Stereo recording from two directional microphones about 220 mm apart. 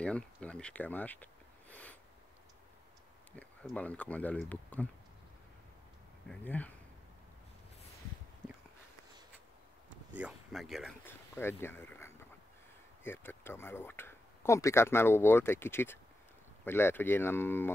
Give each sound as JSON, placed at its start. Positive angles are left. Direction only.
{"t": 0.0, "sound": "speech", "side_deg": 5}
{"t": 3.3, "sound": "speech", "side_deg": 5}
{"t": 6.2, "sound": "speech", "side_deg": 5}
{"t": 8.4, "sound": "walk", "side_deg": -20}
{"t": 10.1, "sound": "speech", "side_deg": -5}